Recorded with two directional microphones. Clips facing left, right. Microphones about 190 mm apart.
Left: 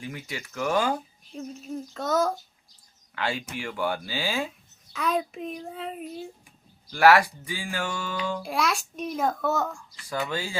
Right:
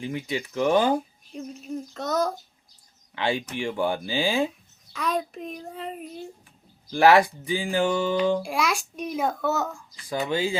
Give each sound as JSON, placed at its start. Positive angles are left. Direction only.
{"t": 0.0, "sound": "speech", "side_deg": -20}
{"t": 1.4, "sound": "a child's voice", "side_deg": 0}
{"t": 3.2, "sound": "speech", "side_deg": -20}
{"t": 4.9, "sound": "a child's voice", "side_deg": 5}
{"t": 6.9, "sound": "speech", "side_deg": -20}
{"t": 8.5, "sound": "a child's voice", "side_deg": 0}
{"t": 10.2, "sound": "speech", "side_deg": -20}